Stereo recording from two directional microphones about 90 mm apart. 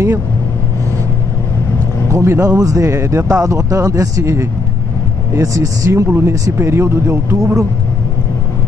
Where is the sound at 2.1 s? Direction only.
30° right (ahead or behind).